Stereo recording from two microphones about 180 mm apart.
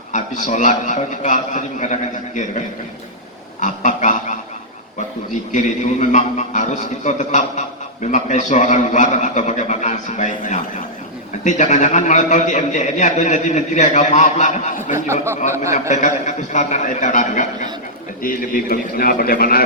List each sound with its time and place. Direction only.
0.1 s a man's voice: 45° left (ahead or behind)
3.6 s a sound: 45° left (ahead or behind)
5.3 s a man's voice: 45° left (ahead or behind)
14.9 s speech: 15° right (ahead or behind)
15.9 s a man's voice: 40° left (ahead or behind)